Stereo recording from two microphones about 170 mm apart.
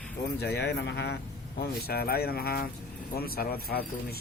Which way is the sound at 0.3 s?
80° left.